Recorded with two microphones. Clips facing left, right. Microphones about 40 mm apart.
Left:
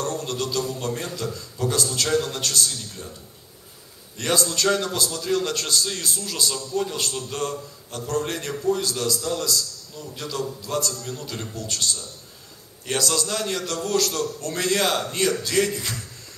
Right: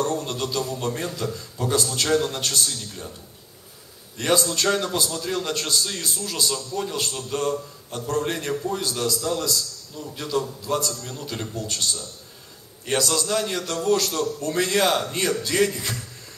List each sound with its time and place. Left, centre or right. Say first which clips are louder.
0.2 s a man's voice: even; centre
4.2 s a man's voice: right 1 dB; centre
5.1 s a man's voice: left 2 dB; centre
10.9 s a man's voice: left 1 dB; centre
11.1 s a man's voice: right 2 dB; centre
12.8 s a man's voice: right 1 dB; centre; by 14.5 s right
14.5 s a man's voice: right 2 dB; centre